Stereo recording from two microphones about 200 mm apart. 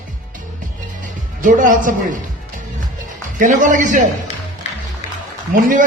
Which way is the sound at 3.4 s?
40° right (ahead or behind).